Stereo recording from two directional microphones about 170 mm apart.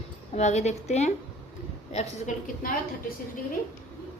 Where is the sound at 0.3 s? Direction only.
40° left (ahead or behind).